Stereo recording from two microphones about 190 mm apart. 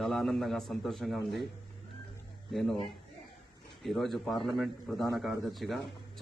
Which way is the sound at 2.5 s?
Centre (ahead or behind).